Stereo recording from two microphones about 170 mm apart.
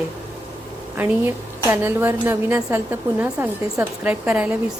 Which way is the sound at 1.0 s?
10° right (ahead or behind).